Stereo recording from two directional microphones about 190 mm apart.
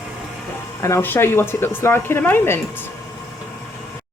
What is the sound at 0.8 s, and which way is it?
Speech, 15° left (ahead or behind).